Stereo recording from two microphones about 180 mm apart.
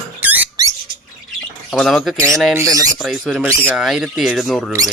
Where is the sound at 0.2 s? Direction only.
10° right (ahead or behind).